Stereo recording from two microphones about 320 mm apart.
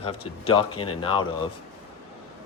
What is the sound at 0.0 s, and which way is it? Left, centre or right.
Speech, centre.